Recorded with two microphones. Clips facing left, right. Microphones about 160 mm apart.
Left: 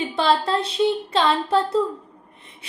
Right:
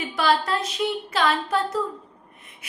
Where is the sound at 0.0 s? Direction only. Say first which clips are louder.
Left 2 dB; 30° left (ahead or behind).